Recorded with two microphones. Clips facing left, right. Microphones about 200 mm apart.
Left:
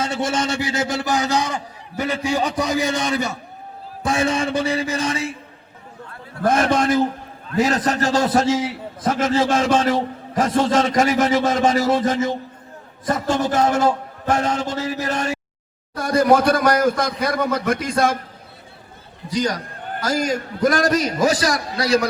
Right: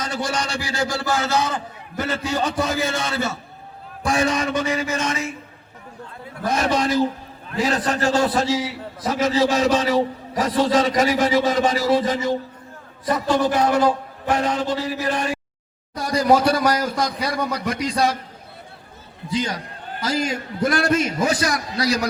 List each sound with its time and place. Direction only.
0.0 s a man's voice: 25° left (ahead or behind)
6.4 s a man's voice: 50° left (ahead or behind)
19.3 s a man's voice: 45° left (ahead or behind)